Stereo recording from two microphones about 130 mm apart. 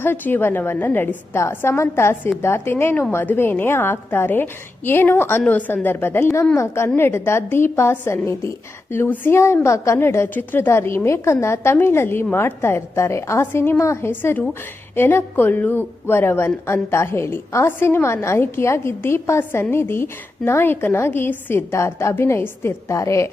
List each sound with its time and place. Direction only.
0.0 s a woman's voice: 15° left (ahead or behind)